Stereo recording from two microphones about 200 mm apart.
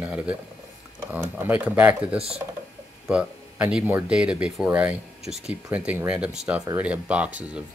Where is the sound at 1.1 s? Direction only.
10° right (ahead or behind).